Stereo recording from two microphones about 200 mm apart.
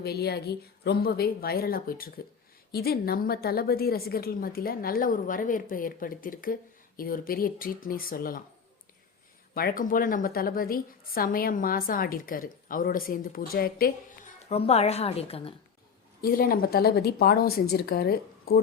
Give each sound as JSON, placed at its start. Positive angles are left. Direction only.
{"t": 0.0, "sound": "a woman's voice", "side_deg": 50}
{"t": 9.6, "sound": "a woman's voice", "side_deg": 45}
{"t": 14.5, "sound": "a woman's voice", "side_deg": 30}
{"t": 16.2, "sound": "a woman's voice", "side_deg": 50}